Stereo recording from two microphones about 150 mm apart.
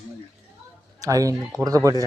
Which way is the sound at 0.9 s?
25° right (ahead or behind).